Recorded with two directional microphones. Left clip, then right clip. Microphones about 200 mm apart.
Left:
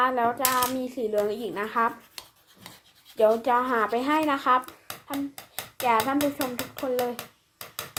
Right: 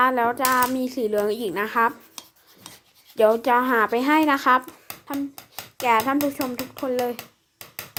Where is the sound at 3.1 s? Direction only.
45° right (ahead or behind).